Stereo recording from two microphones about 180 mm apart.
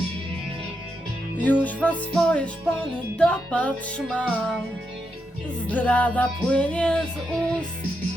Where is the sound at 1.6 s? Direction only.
10° left (ahead or behind).